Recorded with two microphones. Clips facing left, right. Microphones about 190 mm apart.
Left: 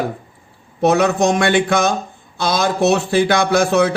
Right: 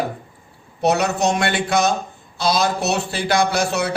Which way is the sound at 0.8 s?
50° left (ahead or behind).